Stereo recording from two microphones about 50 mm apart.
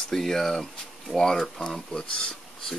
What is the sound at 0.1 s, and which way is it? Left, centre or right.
Speech, centre.